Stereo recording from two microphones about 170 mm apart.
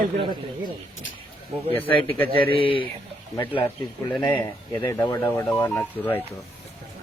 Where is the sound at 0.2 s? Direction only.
25° right (ahead or behind).